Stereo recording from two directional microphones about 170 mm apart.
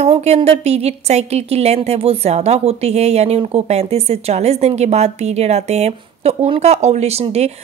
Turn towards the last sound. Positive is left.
turn(degrees=-40)  # may be behind; listen again after turning